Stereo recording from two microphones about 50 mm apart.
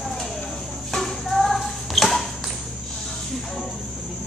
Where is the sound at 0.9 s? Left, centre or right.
Centre.